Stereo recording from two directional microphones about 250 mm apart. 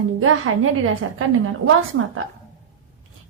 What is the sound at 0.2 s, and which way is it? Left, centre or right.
Speech, right.